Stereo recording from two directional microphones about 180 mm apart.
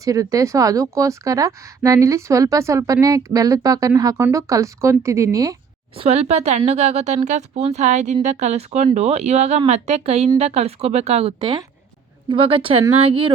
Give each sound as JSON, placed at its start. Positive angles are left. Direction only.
{"t": 0.0, "sound": "speech", "side_deg": -20}
{"t": 6.0, "sound": "speech", "side_deg": -35}